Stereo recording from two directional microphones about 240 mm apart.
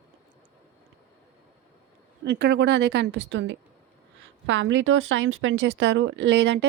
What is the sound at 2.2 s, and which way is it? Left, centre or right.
Speech, right.